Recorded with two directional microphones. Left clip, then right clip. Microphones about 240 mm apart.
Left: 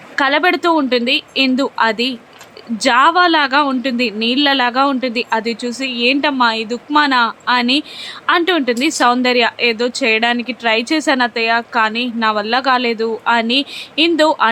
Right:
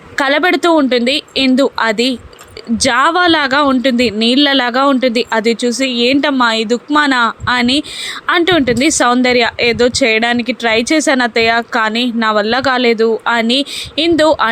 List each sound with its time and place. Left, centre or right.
0.2 s a woman's voice: centre